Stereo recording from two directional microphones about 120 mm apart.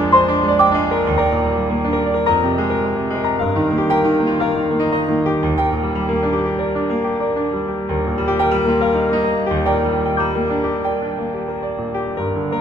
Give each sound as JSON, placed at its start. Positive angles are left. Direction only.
{"t": 0.1, "sound": "music", "side_deg": 40}